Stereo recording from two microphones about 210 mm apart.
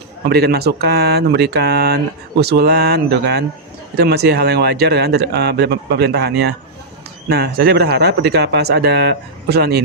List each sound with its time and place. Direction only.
0.3 s speech: 50° right (ahead or behind)